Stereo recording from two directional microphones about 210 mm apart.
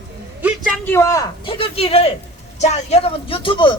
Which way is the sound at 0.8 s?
10° left (ahead or behind).